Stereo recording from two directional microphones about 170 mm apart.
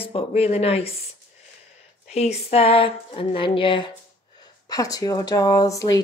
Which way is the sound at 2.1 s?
40° left (ahead or behind).